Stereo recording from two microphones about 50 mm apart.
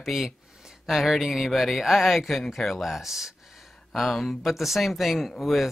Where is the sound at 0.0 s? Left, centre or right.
Centre.